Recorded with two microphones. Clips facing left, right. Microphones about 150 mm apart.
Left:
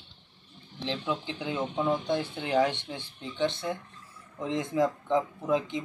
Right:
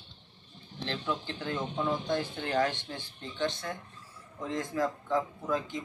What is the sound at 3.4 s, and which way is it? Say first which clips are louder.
Speech: left 4 dB; 25° left (ahead or behind).